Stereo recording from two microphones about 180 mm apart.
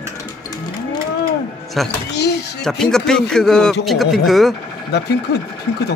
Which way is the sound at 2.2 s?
65° left (ahead or behind).